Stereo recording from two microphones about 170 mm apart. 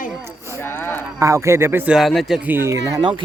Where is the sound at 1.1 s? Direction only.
20° right (ahead or behind).